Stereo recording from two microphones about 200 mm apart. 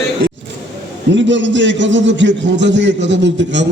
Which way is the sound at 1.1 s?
65° right (ahead or behind).